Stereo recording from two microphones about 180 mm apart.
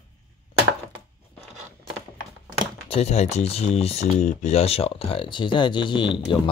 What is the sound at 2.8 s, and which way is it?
Speech, 35° left (ahead or behind).